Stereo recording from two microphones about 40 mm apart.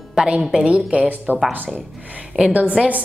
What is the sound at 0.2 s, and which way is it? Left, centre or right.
Speech, right.